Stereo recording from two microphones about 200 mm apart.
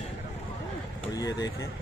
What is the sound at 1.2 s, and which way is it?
Speech, 20° left (ahead or behind).